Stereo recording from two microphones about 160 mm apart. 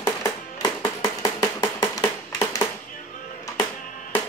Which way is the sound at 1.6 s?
20° left (ahead or behind).